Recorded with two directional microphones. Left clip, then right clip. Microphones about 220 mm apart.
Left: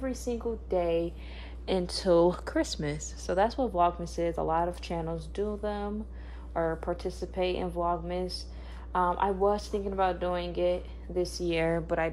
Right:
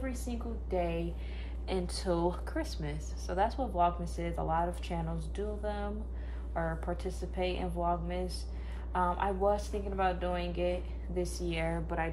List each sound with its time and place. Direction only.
0.3 s speech: 30° left (ahead or behind)
1.7 s speech: 50° left (ahead or behind)